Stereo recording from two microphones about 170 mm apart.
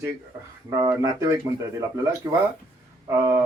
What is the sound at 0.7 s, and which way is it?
A man's voice, 20° right (ahead or behind).